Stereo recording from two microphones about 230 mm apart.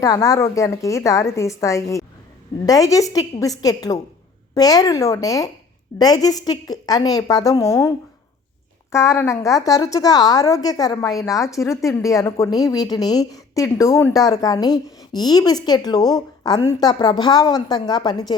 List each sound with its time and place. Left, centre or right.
0.0 s a woman's voice: centre